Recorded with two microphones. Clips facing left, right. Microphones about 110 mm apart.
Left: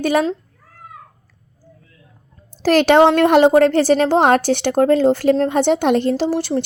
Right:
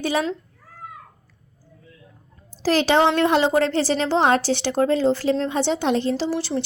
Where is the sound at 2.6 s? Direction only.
60° left (ahead or behind).